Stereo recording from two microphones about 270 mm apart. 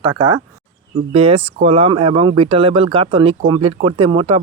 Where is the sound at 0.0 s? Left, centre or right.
Centre.